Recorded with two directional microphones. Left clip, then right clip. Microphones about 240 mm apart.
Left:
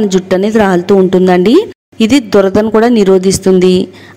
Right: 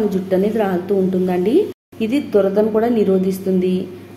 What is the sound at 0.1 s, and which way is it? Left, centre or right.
A woman's voice, left.